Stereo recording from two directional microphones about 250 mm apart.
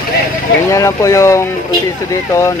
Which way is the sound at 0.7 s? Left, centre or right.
Centre.